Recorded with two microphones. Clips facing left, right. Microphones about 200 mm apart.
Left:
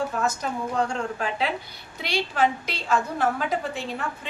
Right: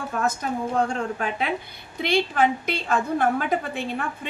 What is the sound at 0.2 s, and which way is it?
Speech, 55° right (ahead or behind).